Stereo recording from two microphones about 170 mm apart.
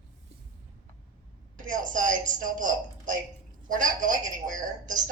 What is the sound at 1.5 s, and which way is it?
A woman's voice, 50° right (ahead or behind).